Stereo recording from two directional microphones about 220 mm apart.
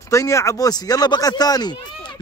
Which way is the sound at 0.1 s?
15° left (ahead or behind).